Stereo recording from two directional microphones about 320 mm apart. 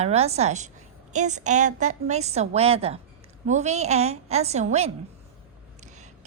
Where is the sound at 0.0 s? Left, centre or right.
Centre.